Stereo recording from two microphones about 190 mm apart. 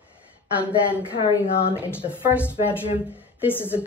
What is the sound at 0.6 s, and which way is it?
Speech, 5° right (ahead or behind).